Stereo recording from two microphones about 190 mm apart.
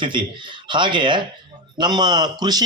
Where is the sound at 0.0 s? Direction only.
25° right (ahead or behind).